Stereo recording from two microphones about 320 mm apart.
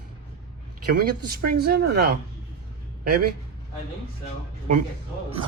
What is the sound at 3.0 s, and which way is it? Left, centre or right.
Speech, right.